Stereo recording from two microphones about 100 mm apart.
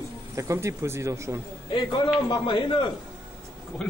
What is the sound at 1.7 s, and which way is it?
A man's voice, 50° left (ahead or behind).